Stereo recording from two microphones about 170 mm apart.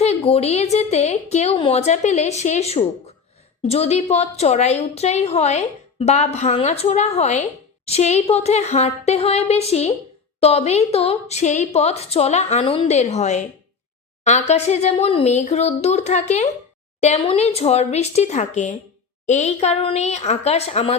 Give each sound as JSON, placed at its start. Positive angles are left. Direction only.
{"t": 0.0, "sound": "a woman's voice", "side_deg": 40}